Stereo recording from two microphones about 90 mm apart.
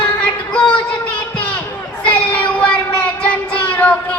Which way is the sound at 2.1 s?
15° left (ahead or behind).